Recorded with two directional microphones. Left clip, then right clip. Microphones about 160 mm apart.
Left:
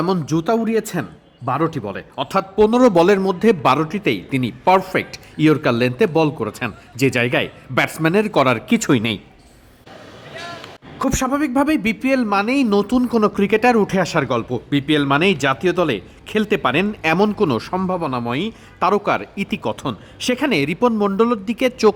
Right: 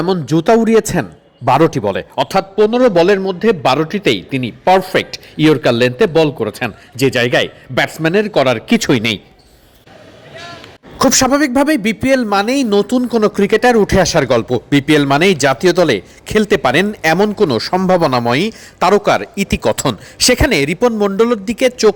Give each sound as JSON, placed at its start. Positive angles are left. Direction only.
{"t": 0.0, "sound": "a man's voice", "side_deg": -10}
{"t": 2.6, "sound": "a man's voice", "side_deg": 10}
{"t": 4.3, "sound": "a man's voice", "side_deg": 0}
{"t": 10.3, "sound": "a sound", "side_deg": 0}
{"t": 10.9, "sound": "a man's voice", "side_deg": -25}
{"t": 17.8, "sound": "a man's voice", "side_deg": -25}